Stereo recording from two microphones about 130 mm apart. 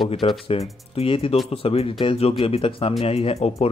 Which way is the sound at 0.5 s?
50° left (ahead or behind).